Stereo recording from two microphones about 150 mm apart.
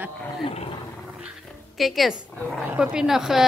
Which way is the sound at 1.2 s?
Centre (ahead or behind).